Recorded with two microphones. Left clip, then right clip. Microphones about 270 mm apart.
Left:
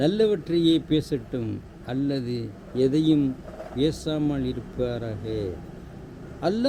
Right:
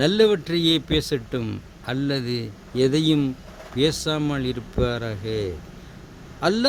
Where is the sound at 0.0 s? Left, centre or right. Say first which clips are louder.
Right 4 dB; right.